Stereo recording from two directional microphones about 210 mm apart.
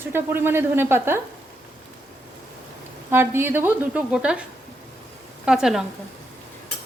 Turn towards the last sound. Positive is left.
turn(degrees=-5)  # may be behind; listen again after turning